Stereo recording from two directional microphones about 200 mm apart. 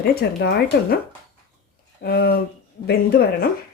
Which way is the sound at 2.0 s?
50° left (ahead or behind).